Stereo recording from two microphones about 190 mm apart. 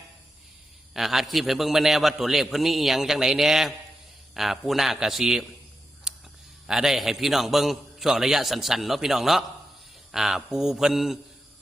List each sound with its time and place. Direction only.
0.9 s a man's voice: centre (ahead or behind)
6.1 s a sound: 5° right (ahead or behind)
6.7 s a man's voice: centre (ahead or behind)